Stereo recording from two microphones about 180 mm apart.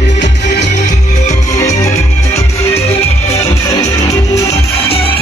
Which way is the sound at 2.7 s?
35° left (ahead or behind).